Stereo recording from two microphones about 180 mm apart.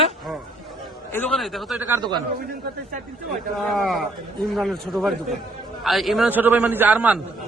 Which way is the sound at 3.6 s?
Centre (ahead or behind).